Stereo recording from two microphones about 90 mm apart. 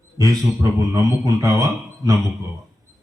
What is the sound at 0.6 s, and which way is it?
Speech, 35° right (ahead or behind).